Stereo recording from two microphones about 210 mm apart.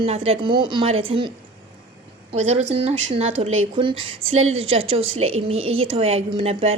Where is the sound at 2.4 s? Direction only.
30° right (ahead or behind).